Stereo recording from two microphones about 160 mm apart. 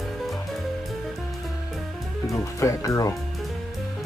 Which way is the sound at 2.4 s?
20° left (ahead or behind).